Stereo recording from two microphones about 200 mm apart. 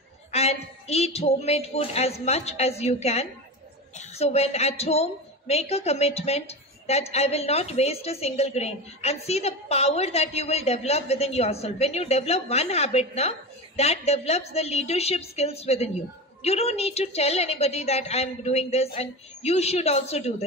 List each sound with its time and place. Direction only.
0.3 s a woman's voice: 30° left (ahead or behind)